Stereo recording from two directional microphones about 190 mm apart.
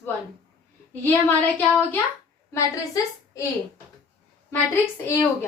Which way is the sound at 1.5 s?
10° left (ahead or behind).